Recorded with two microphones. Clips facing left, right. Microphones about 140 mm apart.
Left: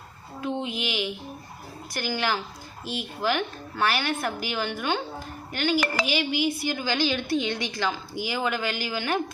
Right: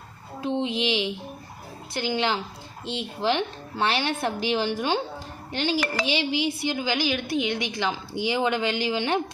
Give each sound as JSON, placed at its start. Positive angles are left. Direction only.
{"t": 0.6, "sound": "a woman's voice", "side_deg": -30}